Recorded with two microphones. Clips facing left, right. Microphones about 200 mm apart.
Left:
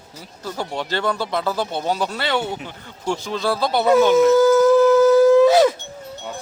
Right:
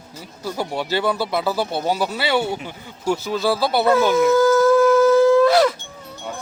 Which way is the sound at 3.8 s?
20° left (ahead or behind).